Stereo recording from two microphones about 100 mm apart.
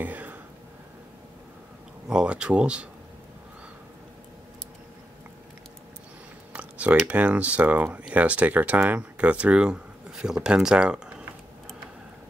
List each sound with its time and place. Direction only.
0.0 s a sound: 15° right (ahead or behind)
2.0 s speech: 10° right (ahead or behind)
6.5 s speech: 15° right (ahead or behind)